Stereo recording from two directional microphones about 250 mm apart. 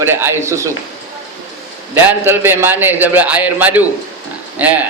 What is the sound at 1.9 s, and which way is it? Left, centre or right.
A man's voice, centre.